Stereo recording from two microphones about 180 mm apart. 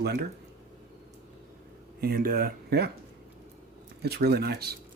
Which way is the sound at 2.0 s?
55° right (ahead or behind).